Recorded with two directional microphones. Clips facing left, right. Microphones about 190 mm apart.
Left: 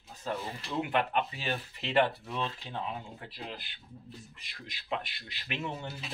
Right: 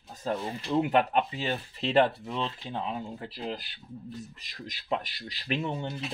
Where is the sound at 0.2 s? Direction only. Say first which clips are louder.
Right 5 dB; 35° right (ahead or behind).